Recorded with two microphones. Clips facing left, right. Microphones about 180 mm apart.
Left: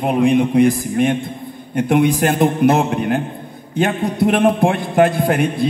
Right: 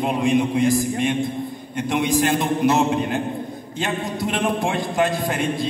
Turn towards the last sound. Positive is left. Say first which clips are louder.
# left 6 dB
turn(degrees=60)  # may be behind; listen again after turning